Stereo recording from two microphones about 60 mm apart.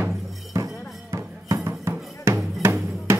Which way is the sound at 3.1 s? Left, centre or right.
Right.